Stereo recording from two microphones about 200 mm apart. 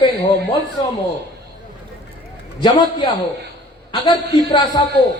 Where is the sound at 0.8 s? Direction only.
25° left (ahead or behind).